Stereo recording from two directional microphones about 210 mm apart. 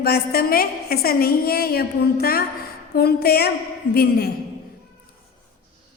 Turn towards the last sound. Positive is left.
turn(degrees=45)  # may be behind; listen again after turning